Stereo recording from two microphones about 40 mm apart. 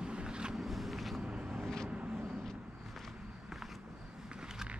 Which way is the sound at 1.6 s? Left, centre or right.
Centre.